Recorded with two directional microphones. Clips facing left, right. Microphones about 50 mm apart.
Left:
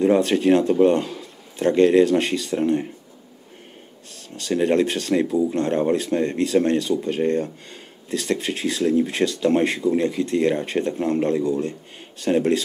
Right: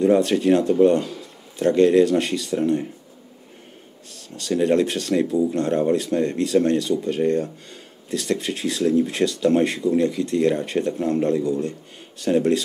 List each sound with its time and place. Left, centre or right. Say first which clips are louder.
0.0 s speech: even; left
4.4 s speech: even; left